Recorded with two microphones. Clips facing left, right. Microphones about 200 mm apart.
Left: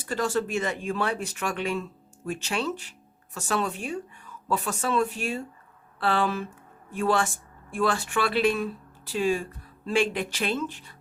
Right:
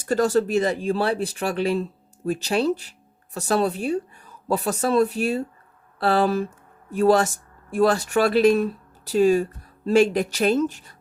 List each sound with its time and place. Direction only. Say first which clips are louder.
0.0 s speech: right 7 dB; 40° right (ahead or behind)